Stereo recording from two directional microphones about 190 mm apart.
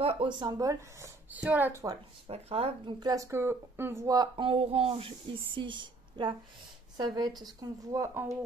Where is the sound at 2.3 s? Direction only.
30° right (ahead or behind).